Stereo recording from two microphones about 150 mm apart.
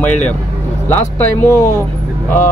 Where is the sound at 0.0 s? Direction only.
10° left (ahead or behind).